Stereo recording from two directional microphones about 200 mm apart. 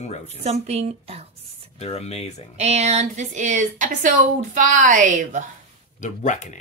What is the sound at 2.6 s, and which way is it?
Speech, 35° right (ahead or behind).